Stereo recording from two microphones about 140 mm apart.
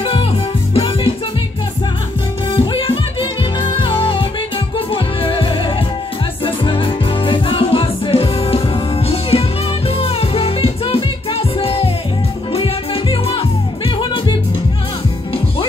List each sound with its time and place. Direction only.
0.0 s music: 40° left (ahead or behind)
2.5 s music: 40° left (ahead or behind)